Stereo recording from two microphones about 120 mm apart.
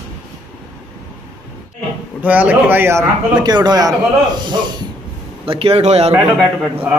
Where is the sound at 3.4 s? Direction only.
35° right (ahead or behind).